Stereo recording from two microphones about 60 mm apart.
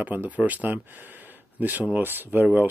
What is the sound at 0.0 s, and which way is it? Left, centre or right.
Speech, right.